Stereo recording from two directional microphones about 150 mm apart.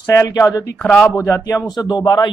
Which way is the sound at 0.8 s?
10° left (ahead or behind).